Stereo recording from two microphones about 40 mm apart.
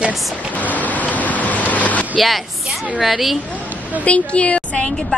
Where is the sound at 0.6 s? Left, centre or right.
Left.